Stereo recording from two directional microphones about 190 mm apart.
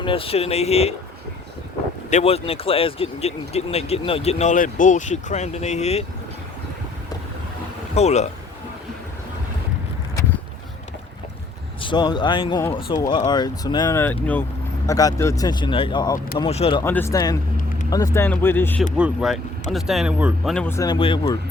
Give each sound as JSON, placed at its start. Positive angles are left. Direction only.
{"t": 0.0, "sound": "speech", "side_deg": 30}
{"t": 2.0, "sound": "speech", "side_deg": 35}
{"t": 7.9, "sound": "speech", "side_deg": 35}
{"t": 11.8, "sound": "speech", "side_deg": 25}
{"t": 16.8, "sound": "speech", "side_deg": 10}
{"t": 18.9, "sound": "speech", "side_deg": -5}
{"t": 20.7, "sound": "speech", "side_deg": 20}